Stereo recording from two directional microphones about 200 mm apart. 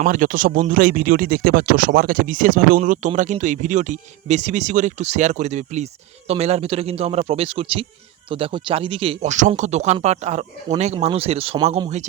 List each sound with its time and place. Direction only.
0.0 s speech: 40° right (ahead or behind)